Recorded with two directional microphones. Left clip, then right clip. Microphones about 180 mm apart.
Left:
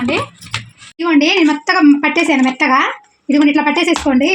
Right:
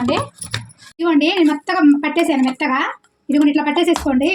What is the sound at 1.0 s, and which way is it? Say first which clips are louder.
Speech: left 3 dB; 25° left (ahead or behind).